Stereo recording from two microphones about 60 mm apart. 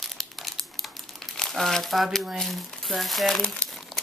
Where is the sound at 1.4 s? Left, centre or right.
Centre.